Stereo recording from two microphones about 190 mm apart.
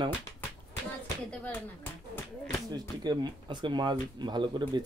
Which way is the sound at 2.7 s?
20° right (ahead or behind).